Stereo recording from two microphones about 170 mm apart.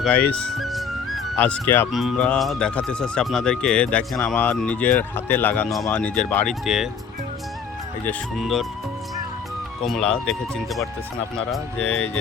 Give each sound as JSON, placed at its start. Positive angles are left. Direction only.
{"t": 0.3, "sound": "music", "side_deg": 0}
{"t": 1.4, "sound": "speech", "side_deg": 10}
{"t": 1.9, "sound": "speech", "side_deg": 0}
{"t": 8.0, "sound": "speech", "side_deg": 0}
{"t": 9.8, "sound": "speech", "side_deg": 0}